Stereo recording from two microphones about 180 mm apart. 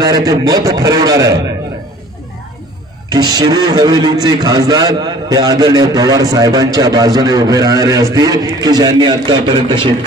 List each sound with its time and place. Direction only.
0.0 s a man's voice: 20° right (ahead or behind)
3.1 s a man's voice: 20° right (ahead or behind)